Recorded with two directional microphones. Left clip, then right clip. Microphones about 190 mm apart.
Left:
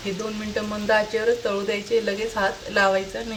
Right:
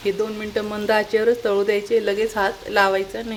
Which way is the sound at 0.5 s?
45° right (ahead or behind).